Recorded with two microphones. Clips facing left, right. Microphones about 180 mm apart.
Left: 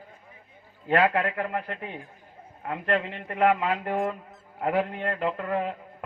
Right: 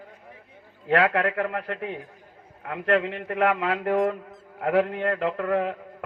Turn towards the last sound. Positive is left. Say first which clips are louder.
# right 3 dB
turn(degrees=-65)  # may be behind; listen again after turning